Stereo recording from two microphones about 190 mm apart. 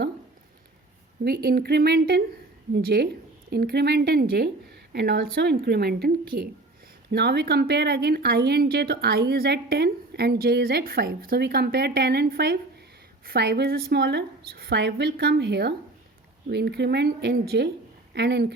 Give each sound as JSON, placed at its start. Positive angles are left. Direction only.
{"t": 1.2, "sound": "a woman's voice", "side_deg": -55}